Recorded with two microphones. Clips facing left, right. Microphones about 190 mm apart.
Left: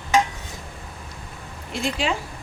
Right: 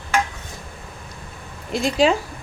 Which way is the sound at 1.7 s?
40° right (ahead or behind).